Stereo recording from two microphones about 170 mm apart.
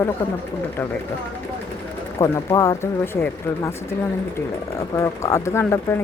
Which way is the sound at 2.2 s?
20° left (ahead or behind).